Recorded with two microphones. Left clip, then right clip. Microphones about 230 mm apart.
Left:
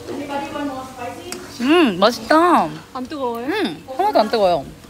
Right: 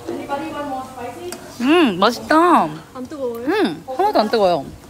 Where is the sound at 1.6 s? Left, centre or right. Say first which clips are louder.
Even; centre.